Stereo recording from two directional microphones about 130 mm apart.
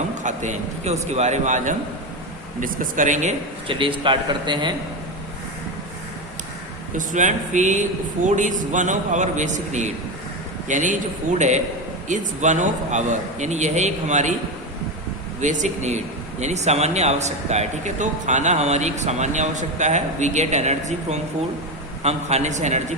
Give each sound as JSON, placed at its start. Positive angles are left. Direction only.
{"t": 0.2, "sound": "a man's voice", "side_deg": -70}
{"t": 2.6, "sound": "speech", "side_deg": -90}
{"t": 3.7, "sound": "a man's voice", "side_deg": -40}
{"t": 6.9, "sound": "a man's voice", "side_deg": -75}
{"t": 15.4, "sound": "speech", "side_deg": -70}